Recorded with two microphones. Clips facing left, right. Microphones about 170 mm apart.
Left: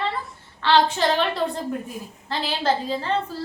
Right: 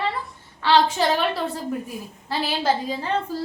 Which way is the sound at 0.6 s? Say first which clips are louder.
Even; 10° right (ahead or behind).